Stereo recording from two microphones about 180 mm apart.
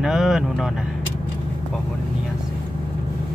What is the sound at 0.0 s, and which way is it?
Speech, centre (ahead or behind).